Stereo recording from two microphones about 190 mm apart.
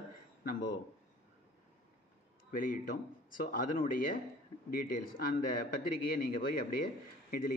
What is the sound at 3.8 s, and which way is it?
Speech, 45° left (ahead or behind).